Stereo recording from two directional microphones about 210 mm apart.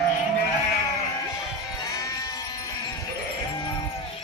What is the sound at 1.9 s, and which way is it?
Sheep, 15° left (ahead or behind).